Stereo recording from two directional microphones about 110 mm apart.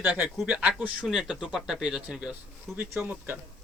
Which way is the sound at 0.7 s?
5° right (ahead or behind).